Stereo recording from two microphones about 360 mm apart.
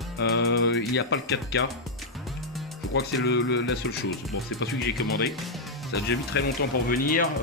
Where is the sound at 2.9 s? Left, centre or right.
Left.